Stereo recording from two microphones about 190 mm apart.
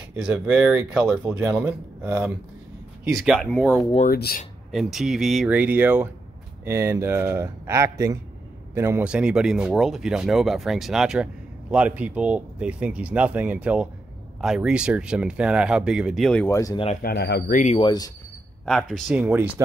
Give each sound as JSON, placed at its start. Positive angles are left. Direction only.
{"t": 0.1, "sound": "speech", "side_deg": -5}
{"t": 4.1, "sound": "speech", "side_deg": 55}
{"t": 4.6, "sound": "speech", "side_deg": 0}
{"t": 17.0, "sound": "speech", "side_deg": 60}
{"t": 17.7, "sound": "speech", "side_deg": 20}
{"t": 18.7, "sound": "speech", "side_deg": 5}
{"t": 19.0, "sound": "speech", "side_deg": -10}